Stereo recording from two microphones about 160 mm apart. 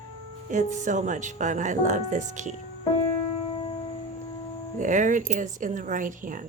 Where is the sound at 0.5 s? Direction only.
50° right (ahead or behind).